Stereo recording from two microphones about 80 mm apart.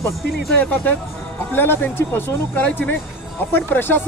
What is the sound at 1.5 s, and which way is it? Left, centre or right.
Speech, left.